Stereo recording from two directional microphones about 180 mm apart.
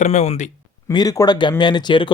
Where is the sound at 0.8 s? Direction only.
20° left (ahead or behind).